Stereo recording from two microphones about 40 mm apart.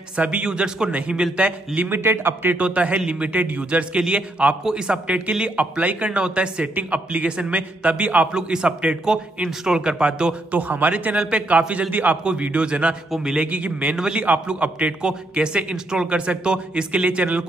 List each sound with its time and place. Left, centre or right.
0.1 s speech: right
1.9 s a man's voice: right
2.5 s a man's voice: right
4.6 s speech: centre
5.0 s a man's voice: right
8.3 s speech: centre
10.5 s a man's voice: right
11.1 s speech: right
11.9 s a man's voice: right
12.2 s a man's voice: right
13.9 s speech: centre
14.5 s a man's voice: right
15.0 s speech: right